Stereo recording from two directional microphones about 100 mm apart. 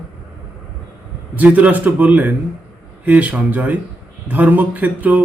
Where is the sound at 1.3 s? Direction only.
15° right (ahead or behind).